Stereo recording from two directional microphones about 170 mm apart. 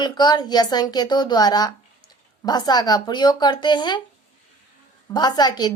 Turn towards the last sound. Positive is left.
turn(degrees=25)  # may be behind; listen again after turning